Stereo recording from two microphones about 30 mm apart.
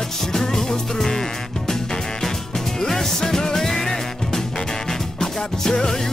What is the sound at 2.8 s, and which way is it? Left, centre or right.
Music, centre.